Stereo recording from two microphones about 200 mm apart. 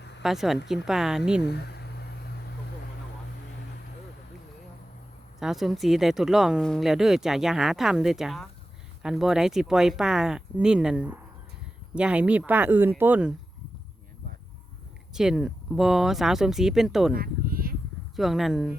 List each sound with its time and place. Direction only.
0.2 s speech: centre (ahead or behind)
1.4 s a sound: 55° left (ahead or behind)
5.4 s speech: centre (ahead or behind)
15.1 s speech: centre (ahead or behind)
17.2 s a sound: 45° right (ahead or behind)
18.2 s speech: centre (ahead or behind)